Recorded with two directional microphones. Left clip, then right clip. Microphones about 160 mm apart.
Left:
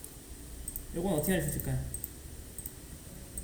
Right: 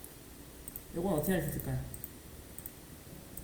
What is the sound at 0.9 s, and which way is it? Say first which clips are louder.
Speech: left 1 dB; 30° right (ahead or behind).